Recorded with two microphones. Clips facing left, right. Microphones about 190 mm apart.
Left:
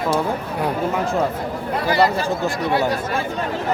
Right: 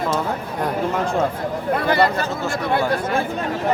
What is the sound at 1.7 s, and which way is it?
Chatter, 55° right (ahead or behind).